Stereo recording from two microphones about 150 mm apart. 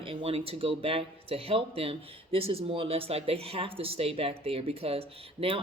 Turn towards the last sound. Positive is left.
turn(degrees=-40)  # may be behind; listen again after turning